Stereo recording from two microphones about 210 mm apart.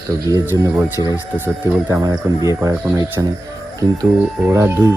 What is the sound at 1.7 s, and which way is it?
Speech, 15° right (ahead or behind).